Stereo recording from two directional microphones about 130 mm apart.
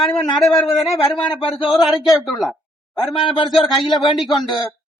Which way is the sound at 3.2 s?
40° left (ahead or behind).